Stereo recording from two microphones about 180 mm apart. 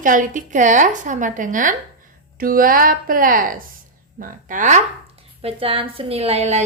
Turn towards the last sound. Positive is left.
turn(degrees=-35)  # may be behind; listen again after turning